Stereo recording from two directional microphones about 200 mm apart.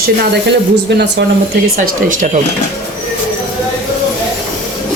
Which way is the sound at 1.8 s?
40° right (ahead or behind).